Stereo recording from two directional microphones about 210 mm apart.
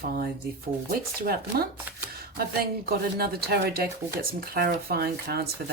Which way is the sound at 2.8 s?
45° right (ahead or behind).